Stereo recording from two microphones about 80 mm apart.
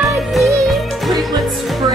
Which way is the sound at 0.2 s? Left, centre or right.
Centre.